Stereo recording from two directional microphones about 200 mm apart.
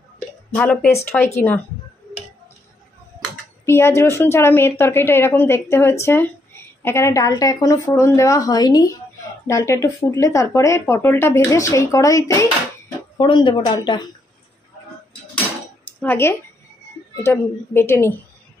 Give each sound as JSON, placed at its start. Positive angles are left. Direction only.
{"t": 0.6, "sound": "a woman's voice", "side_deg": 10}
{"t": 3.6, "sound": "a woman's voice", "side_deg": 10}
{"t": 16.0, "sound": "a woman's voice", "side_deg": 10}